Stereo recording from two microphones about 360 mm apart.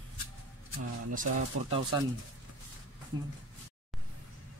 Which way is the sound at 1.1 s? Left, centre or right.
Centre.